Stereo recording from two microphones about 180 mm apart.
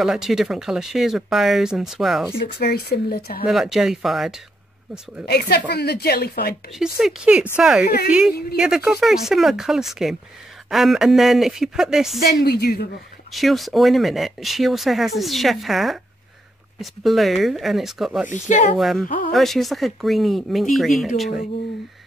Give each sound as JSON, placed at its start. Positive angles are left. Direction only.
{"t": 0.0, "sound": "speech", "side_deg": 0}
{"t": 2.3, "sound": "speech", "side_deg": 60}
{"t": 3.4, "sound": "speech", "side_deg": 0}
{"t": 5.2, "sound": "speech", "side_deg": 65}
{"t": 6.8, "sound": "speech", "side_deg": -5}
{"t": 7.8, "sound": "speech", "side_deg": 60}
{"t": 8.1, "sound": "speech", "side_deg": -5}
{"t": 12.2, "sound": "speech", "side_deg": 60}
{"t": 13.3, "sound": "speech", "side_deg": 0}
{"t": 18.3, "sound": "speech", "side_deg": 45}
{"t": 18.8, "sound": "speech", "side_deg": 0}